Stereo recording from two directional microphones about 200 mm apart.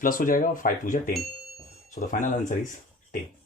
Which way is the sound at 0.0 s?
40° left (ahead or behind).